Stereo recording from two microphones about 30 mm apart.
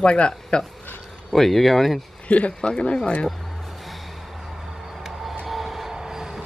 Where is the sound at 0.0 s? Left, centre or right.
Left.